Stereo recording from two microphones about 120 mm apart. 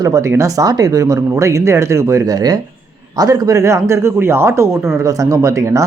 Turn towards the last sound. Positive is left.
turn(degrees=-25)  # may be behind; listen again after turning